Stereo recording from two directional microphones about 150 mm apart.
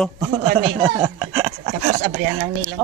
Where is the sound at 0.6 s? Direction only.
15° right (ahead or behind).